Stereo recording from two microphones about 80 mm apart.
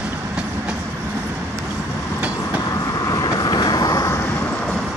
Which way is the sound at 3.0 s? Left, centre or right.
Left.